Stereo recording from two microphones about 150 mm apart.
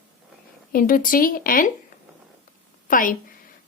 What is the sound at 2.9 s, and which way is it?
Speech, 65° left (ahead or behind).